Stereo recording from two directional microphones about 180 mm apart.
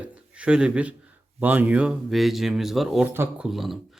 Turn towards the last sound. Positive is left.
turn(degrees=0)  # may be behind; listen again after turning